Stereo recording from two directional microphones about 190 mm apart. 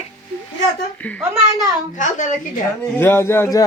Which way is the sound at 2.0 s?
40° left (ahead or behind).